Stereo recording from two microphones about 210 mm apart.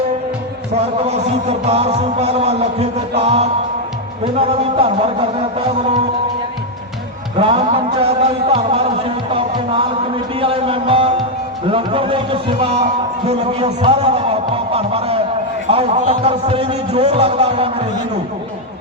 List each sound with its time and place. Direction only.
1.0 s music: 30° right (ahead or behind)
4.4 s a man's voice: 25° right (ahead or behind)
7.3 s music: 25° right (ahead or behind)
10.4 s a sound: 25° right (ahead or behind)
13.2 s music: 30° right (ahead or behind)
15.7 s a man's voice: 25° right (ahead or behind)